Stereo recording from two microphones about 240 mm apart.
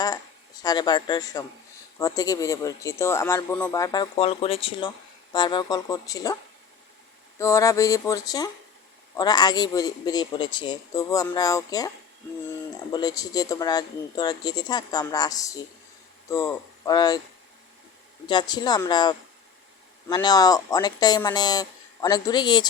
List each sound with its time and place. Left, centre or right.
0.6 s speech: centre
7.3 s speech: centre
12.9 s speech: centre
18.3 s speech: centre